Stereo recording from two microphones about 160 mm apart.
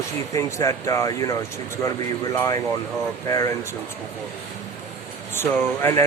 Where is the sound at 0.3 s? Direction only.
20° left (ahead or behind).